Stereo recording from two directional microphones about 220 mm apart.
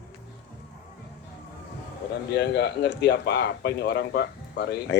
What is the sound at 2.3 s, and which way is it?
Speech, 50° left (ahead or behind).